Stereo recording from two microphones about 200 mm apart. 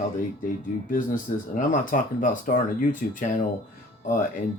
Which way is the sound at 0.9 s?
45° left (ahead or behind).